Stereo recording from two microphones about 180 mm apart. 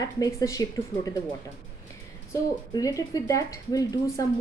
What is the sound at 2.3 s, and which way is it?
Speech, 20° left (ahead or behind).